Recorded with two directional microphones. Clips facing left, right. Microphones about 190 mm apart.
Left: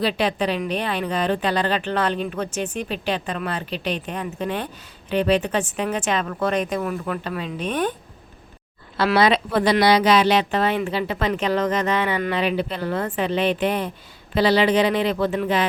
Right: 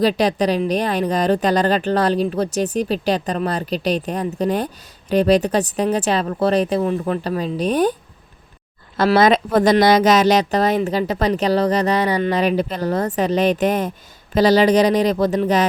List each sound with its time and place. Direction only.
0.0 s a woman's voice: 40° right (ahead or behind)
9.0 s a woman's voice: 45° right (ahead or behind)